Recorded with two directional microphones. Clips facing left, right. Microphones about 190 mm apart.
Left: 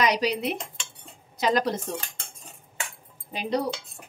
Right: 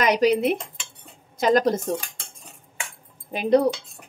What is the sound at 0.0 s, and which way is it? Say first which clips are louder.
Cutlery: right 5 dB; 50° right (ahead or behind).